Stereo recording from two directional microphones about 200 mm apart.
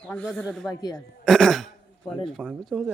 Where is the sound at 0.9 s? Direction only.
5° left (ahead or behind).